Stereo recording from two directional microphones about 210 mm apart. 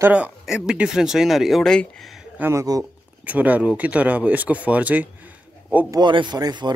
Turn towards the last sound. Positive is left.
turn(degrees=-20)  # may be behind; listen again after turning